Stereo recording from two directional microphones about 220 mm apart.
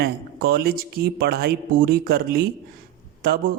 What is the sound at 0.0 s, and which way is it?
A man's voice, 45° right (ahead or behind).